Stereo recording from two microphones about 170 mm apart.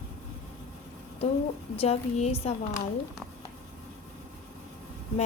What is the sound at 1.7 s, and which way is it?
Speech, 40° left (ahead or behind).